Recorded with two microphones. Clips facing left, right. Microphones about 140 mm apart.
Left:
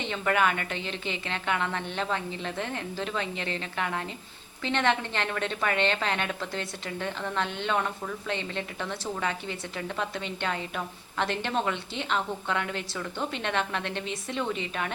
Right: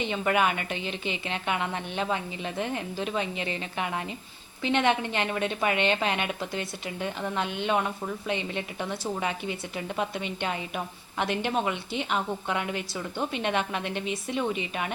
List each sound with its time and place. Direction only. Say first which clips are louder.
0.0 s a woman's voice: right 1 dB; 15° right (ahead or behind)